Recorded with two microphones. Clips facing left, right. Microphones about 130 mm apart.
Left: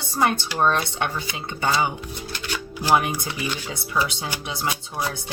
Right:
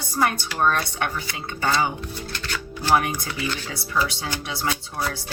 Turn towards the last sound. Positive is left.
turn(degrees=20)  # may be behind; listen again after turning